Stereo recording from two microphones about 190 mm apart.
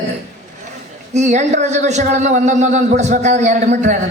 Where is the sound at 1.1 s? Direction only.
40° right (ahead or behind).